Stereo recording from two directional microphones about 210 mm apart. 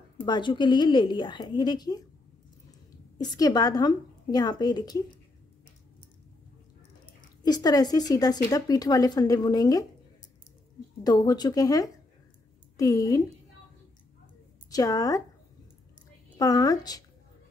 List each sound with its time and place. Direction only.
0.2 s a woman's voice: 20° left (ahead or behind)
3.2 s a woman's voice: 20° left (ahead or behind)
7.2 s speech: 20° left (ahead or behind)
11.1 s speech: 20° left (ahead or behind)
14.7 s speech: 15° left (ahead or behind)
16.3 s speech: 15° left (ahead or behind)